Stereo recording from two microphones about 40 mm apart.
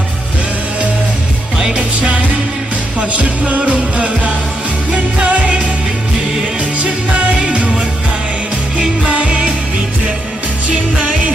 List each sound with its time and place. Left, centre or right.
1.7 s music: right
3.0 s music: right
6.8 s music: right
9.0 s music: right
10.7 s music: right